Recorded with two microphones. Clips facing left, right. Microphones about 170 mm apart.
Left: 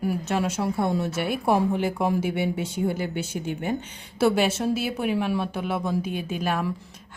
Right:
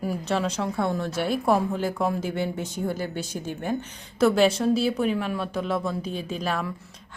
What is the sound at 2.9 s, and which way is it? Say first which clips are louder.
Speech: left 1 dB; 55° left (ahead or behind).